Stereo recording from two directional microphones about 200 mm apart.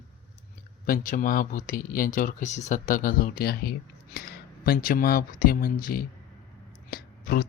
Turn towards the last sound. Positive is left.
turn(degrees=50)  # may be behind; listen again after turning